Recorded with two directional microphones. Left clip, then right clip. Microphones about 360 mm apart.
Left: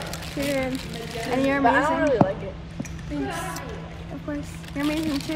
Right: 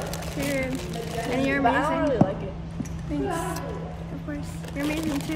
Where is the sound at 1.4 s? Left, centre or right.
Centre.